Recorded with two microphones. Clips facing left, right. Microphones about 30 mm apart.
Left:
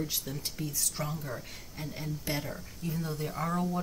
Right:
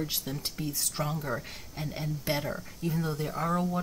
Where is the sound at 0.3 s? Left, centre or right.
Right.